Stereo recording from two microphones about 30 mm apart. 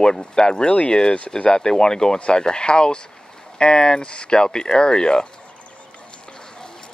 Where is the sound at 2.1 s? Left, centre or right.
Left.